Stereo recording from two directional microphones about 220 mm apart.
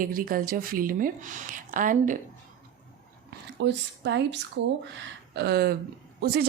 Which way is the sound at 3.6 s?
55° right (ahead or behind).